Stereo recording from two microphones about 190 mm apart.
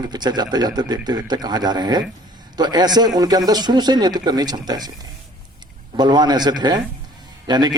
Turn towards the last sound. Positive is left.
turn(degrees=-20)  # may be behind; listen again after turning